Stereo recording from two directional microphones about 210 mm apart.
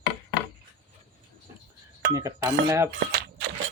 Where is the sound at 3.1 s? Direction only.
50° right (ahead or behind).